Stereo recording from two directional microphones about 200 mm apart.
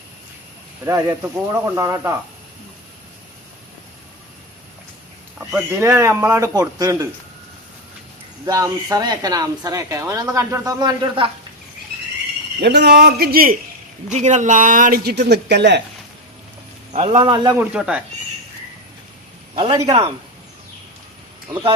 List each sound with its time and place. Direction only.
0.9 s a woman's voice: 15° right (ahead or behind)
5.8 s a woman's voice: 15° right (ahead or behind)
8.4 s a woman's voice: 20° right (ahead or behind)
12.5 s a man's voice: 60° right (ahead or behind)
14.1 s speech: 35° right (ahead or behind); by 15.8 s 60° right (ahead or behind)
16.9 s a man's voice: 30° right (ahead or behind)
17.6 s speech: 5° right (ahead or behind)
19.5 s a man's voice: 25° right (ahead or behind)